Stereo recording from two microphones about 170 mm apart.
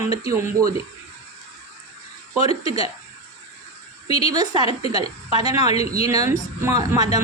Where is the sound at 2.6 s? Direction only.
20° right (ahead or behind).